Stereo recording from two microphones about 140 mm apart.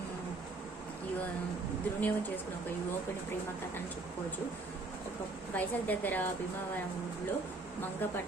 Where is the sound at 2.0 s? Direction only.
15° left (ahead or behind).